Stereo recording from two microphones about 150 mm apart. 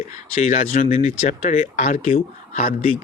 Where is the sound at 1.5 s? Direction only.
55° left (ahead or behind).